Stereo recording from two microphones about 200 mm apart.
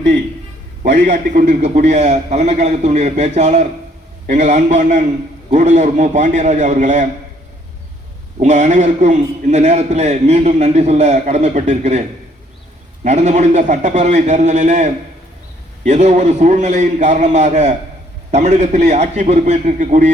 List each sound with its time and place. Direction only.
0.8 s a man's voice: 35° right (ahead or behind)
8.4 s a man's voice: 35° right (ahead or behind)
13.1 s a man's voice: 35° right (ahead or behind)
15.9 s a man's voice: 35° right (ahead or behind)